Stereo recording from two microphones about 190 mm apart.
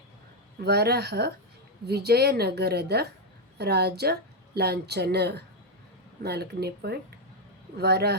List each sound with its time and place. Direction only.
0.6 s a woman's voice: 60° right (ahead or behind)